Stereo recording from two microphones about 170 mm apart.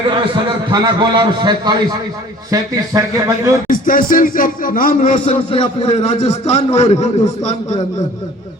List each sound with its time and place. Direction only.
0.1 s a man's voice: 30° right (ahead or behind)
3.7 s speech: 55° left (ahead or behind)
5.2 s a man's voice: 35° left (ahead or behind)